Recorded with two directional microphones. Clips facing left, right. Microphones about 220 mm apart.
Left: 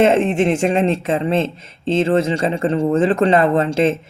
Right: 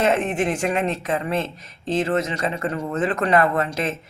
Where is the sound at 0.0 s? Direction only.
25° left (ahead or behind).